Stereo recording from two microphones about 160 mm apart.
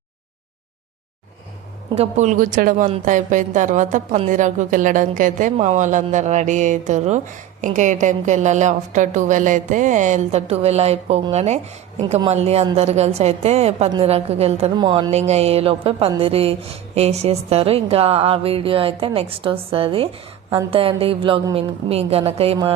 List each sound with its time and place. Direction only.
2.0 s a woman's voice: 45° right (ahead or behind)
14.8 s music: 30° right (ahead or behind)
15.3 s a woman's voice: 40° right (ahead or behind)